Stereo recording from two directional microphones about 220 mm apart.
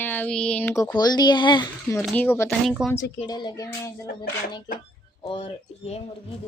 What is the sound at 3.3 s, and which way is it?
Speech, 20° left (ahead or behind).